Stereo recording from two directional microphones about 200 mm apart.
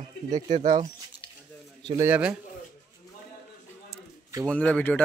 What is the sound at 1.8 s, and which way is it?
Speech, 15° right (ahead or behind).